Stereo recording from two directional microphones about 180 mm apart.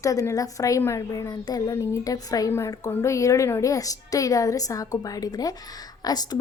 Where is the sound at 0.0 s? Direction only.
20° left (ahead or behind).